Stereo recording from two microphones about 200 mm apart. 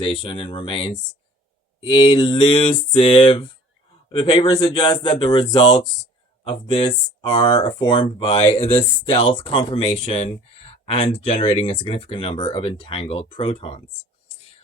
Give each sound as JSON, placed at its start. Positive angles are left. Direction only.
{"t": 0.0, "sound": "speech", "side_deg": 25}